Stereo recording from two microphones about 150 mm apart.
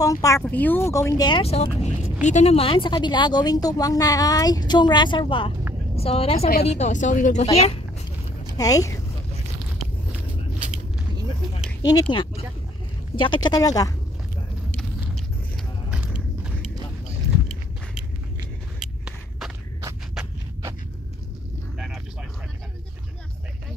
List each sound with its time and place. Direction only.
0.0 s speech: 20° left (ahead or behind)
1.4 s speech: 45° left (ahead or behind)
7.5 s speech: 40° left (ahead or behind)
8.5 s speech: 25° left (ahead or behind)
11.8 s speech: 25° left (ahead or behind)
14.7 s a sound: 5° left (ahead or behind)
15.9 s biting: 5° right (ahead or behind)
18.8 s a sound: 5° right (ahead or behind)
21.7 s vehicle: centre (ahead or behind)